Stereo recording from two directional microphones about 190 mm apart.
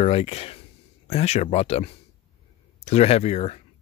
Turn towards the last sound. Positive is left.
turn(degrees=35)  # may be behind; listen again after turning